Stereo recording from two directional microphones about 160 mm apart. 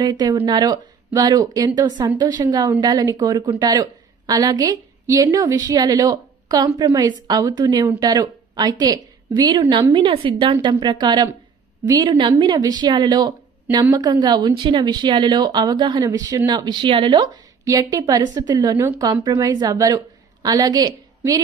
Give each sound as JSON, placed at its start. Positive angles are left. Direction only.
{"t": 0.0, "sound": "a woman's voice", "side_deg": -25}